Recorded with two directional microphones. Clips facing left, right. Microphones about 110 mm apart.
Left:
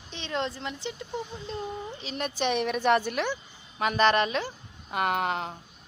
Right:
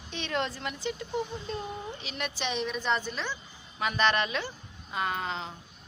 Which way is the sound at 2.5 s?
60° left (ahead or behind).